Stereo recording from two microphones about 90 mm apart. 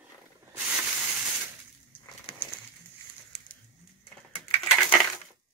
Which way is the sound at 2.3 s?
75° left (ahead or behind).